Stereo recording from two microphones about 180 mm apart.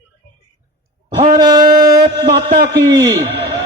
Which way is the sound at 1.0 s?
35° right (ahead or behind).